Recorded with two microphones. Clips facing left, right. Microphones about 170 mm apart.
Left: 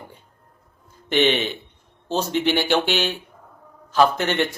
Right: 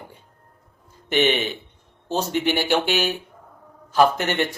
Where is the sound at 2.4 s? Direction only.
10° right (ahead or behind).